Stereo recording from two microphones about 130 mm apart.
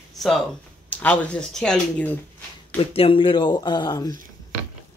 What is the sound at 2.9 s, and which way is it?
Speech, 45° left (ahead or behind).